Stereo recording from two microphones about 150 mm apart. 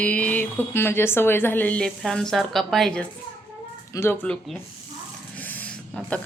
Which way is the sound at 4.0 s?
15° left (ahead or behind).